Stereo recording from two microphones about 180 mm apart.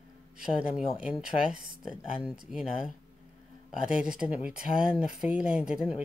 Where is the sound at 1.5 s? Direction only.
50° right (ahead or behind).